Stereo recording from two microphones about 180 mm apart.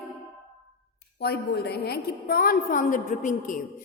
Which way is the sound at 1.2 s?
60° left (ahead or behind).